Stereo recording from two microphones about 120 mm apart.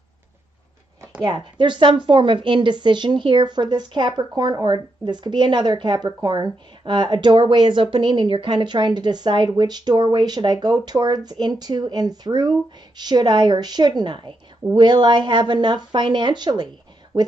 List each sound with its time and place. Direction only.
1.2 s a woman's voice: 40° right (ahead or behind)